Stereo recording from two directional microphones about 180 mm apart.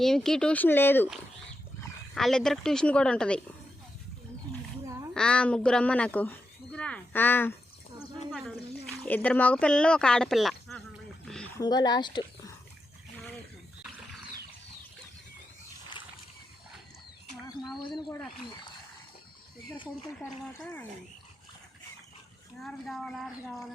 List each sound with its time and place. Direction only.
0.0 s speech: centre (ahead or behind)
2.1 s a woman's voice: centre (ahead or behind)
5.1 s speech: 5° left (ahead or behind)
8.3 s speech: centre (ahead or behind)
11.5 s speech: 20° left (ahead or behind)
17.4 s a sound: 20° left (ahead or behind)
17.8 s speech: 25° left (ahead or behind)
22.6 s a woman's voice: centre (ahead or behind)